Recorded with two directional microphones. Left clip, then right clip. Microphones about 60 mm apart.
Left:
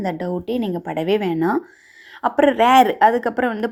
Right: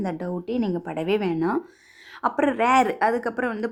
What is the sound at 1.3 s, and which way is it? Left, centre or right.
A woman's voice, left.